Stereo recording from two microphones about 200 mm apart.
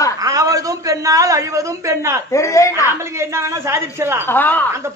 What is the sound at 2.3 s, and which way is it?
Speech, 15° left (ahead or behind).